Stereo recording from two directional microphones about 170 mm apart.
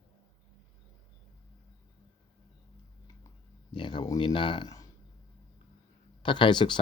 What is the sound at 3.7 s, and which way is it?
Speech, 30° left (ahead or behind).